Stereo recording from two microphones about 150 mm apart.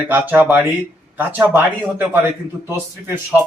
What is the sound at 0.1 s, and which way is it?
A man's voice, 10° right (ahead or behind).